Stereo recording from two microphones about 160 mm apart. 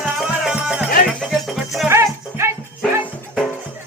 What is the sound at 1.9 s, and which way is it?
Music, 15° right (ahead or behind).